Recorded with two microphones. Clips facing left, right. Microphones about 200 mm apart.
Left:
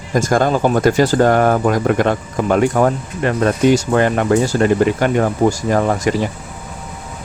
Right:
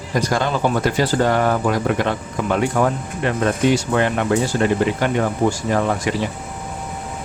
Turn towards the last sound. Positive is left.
turn(degrees=45)  # may be behind; listen again after turning